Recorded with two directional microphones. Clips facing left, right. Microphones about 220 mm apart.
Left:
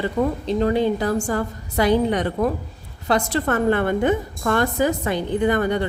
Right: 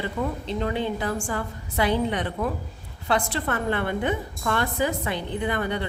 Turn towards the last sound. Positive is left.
turn(degrees=45)  # may be behind; listen again after turning